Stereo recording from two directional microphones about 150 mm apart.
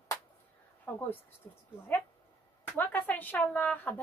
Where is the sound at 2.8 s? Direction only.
10° left (ahead or behind).